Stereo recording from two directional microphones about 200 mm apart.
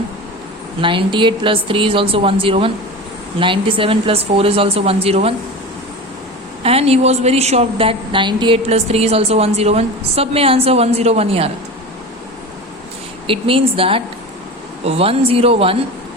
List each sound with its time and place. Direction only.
0.8 s a woman's voice: 25° right (ahead or behind)
6.6 s a woman's voice: 30° right (ahead or behind)
13.2 s a woman's voice: 25° right (ahead or behind)